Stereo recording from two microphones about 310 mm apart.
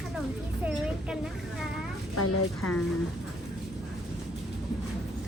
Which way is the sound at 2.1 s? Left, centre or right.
Left.